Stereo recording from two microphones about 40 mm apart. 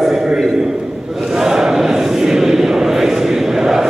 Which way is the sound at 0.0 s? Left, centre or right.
Centre.